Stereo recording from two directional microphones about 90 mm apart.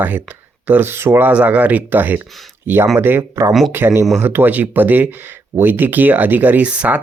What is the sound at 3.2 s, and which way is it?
Speech, 35° right (ahead or behind).